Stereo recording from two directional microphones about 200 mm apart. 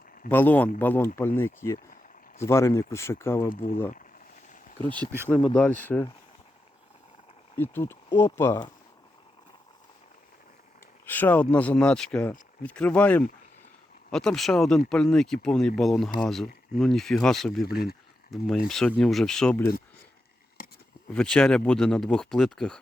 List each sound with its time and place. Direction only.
0.3 s speech: 10° left (ahead or behind)
3.5 s speech: 45° left (ahead or behind)
4.8 s speech: 10° left (ahead or behind)
7.5 s speech: 10° left (ahead or behind)
11.0 s speech: 10° left (ahead or behind)
17.7 s speech: 50° left (ahead or behind)
18.3 s speech: centre (ahead or behind)
21.1 s speech: 5° left (ahead or behind)